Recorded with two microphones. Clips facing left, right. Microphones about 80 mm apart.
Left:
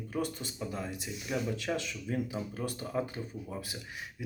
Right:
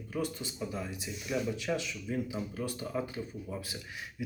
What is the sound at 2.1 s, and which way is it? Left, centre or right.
Speech, left.